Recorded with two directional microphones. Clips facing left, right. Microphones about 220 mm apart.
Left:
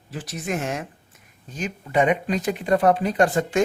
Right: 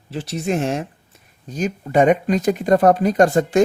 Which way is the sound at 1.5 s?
40° right (ahead or behind).